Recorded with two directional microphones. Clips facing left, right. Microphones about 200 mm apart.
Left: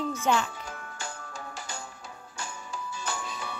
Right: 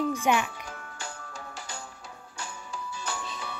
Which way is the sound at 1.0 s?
45° left (ahead or behind).